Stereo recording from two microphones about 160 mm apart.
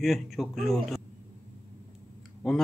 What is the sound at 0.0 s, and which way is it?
Speech, centre (ahead or behind).